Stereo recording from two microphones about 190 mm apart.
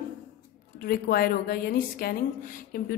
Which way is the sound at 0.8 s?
55° left (ahead or behind).